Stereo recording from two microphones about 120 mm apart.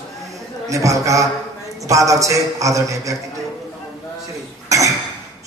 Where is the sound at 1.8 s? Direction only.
25° right (ahead or behind).